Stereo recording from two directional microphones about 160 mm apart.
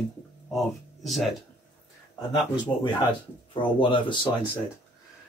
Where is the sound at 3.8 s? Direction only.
30° left (ahead or behind).